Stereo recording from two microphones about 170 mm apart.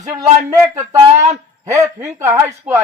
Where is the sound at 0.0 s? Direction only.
20° right (ahead or behind).